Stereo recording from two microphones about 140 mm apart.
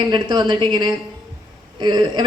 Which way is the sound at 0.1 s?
30° right (ahead or behind).